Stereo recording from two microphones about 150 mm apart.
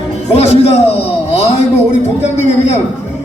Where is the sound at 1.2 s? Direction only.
45° left (ahead or behind).